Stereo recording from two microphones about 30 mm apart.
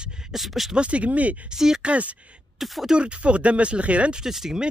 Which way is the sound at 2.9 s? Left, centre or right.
Right.